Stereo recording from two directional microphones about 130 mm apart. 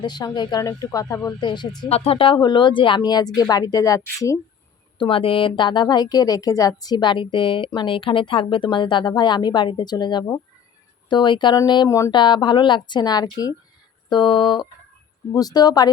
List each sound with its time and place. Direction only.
0.0 s a woman's voice: 35° left (ahead or behind)
1.9 s a woman's voice: 45° left (ahead or behind); by 4.4 s 25° left (ahead or behind)
4.9 s a woman's voice: 45° left (ahead or behind)
11.9 s speech: 25° left (ahead or behind)
12.1 s a woman's voice: 35° left (ahead or behind)